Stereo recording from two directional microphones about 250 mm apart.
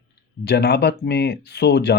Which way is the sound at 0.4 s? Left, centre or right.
Left.